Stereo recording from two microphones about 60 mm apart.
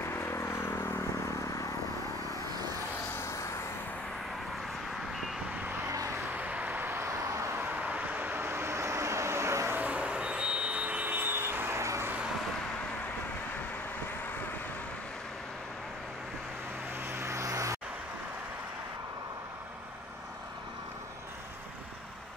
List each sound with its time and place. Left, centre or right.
0.1 s a sound: left
3.2 s vehicle: left
5.9 s vehicle: right
6.3 s vehicle: right
7.1 s vehicle: right
7.8 s vehicle: right
9.8 s vehicle: right
11.8 s vehicle: right
17.0 s vehicle: right